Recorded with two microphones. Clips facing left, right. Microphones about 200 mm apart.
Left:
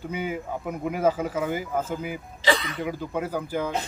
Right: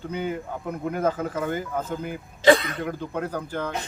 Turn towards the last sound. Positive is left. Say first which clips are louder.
# left 1 dB
turn(degrees=10)  # may be behind; listen again after turning